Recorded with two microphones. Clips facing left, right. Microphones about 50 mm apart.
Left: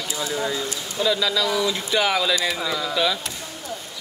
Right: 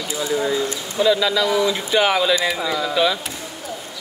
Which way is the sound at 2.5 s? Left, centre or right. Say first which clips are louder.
Right 3 dB; centre.